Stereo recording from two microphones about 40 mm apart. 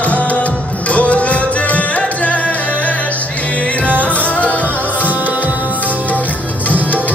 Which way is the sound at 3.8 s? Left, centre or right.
Left.